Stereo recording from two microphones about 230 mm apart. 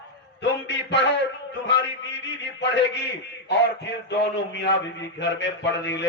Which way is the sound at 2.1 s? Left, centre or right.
Left.